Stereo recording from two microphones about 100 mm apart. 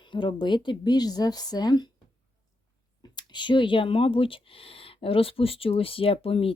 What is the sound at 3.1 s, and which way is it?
Speech, 50° left (ahead or behind).